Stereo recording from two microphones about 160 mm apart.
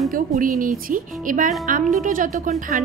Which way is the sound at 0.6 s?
60° right (ahead or behind).